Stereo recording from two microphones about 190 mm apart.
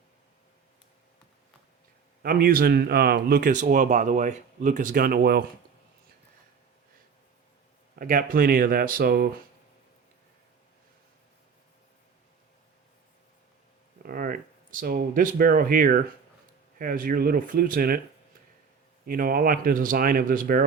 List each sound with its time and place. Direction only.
2.2 s speech: 50° right (ahead or behind)
7.9 s speech: 45° right (ahead or behind)
14.0 s speech: 50° right (ahead or behind)
19.0 s speech: 50° right (ahead or behind)